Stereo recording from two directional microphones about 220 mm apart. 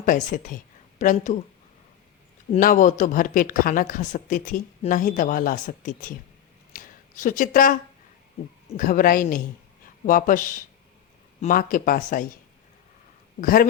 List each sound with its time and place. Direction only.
0.0 s speech: 35° left (ahead or behind)
2.5 s speech: 35° left (ahead or behind)
6.7 s a sound: 40° left (ahead or behind)
8.7 s speech: 40° left (ahead or behind)
13.4 s speech: 40° left (ahead or behind)